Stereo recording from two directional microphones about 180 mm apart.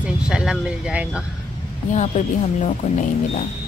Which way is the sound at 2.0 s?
40° left (ahead or behind).